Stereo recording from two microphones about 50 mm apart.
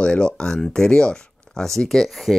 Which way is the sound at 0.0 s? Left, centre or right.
Left.